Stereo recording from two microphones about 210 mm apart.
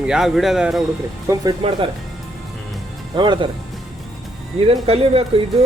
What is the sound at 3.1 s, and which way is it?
Speech, 20° right (ahead or behind).